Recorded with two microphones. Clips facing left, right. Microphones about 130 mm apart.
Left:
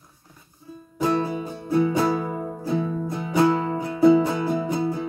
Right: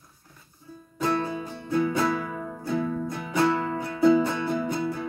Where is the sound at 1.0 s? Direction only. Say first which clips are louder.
Left 4 dB; 20° left (ahead or behind).